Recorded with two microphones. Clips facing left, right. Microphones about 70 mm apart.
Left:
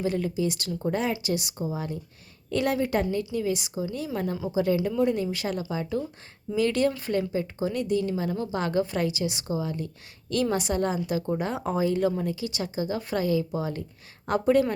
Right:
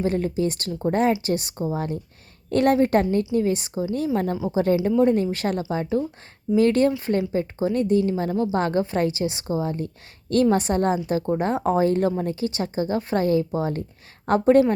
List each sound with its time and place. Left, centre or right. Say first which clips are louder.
0.0 s a woman's voice: right 4 dB; right